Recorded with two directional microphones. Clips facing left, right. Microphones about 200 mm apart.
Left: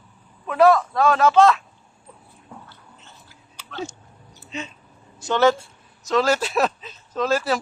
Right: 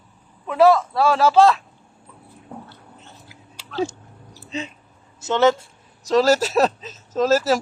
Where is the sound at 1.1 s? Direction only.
30° right (ahead or behind).